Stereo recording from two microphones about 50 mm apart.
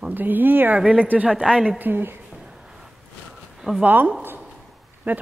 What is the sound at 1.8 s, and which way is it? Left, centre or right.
Speech, right.